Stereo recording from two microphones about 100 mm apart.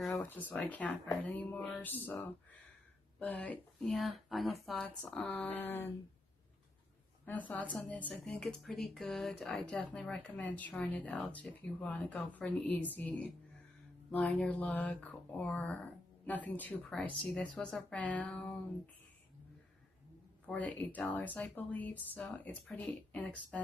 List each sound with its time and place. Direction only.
0.0 s a sound: centre (ahead or behind)
0.3 s speech: 15° left (ahead or behind)
3.2 s speech: 15° left (ahead or behind)
3.8 s speech: centre (ahead or behind)
4.8 s speech: 15° left (ahead or behind)
7.2 s speech: 15° left (ahead or behind)
20.4 s speech: 15° left (ahead or behind)